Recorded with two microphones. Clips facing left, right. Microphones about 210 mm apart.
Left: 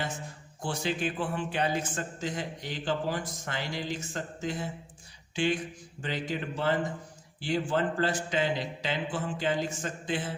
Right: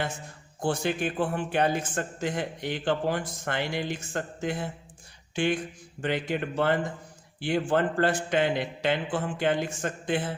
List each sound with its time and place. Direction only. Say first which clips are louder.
0.6 s a man's voice: right 4 dB; 55° right (ahead or behind)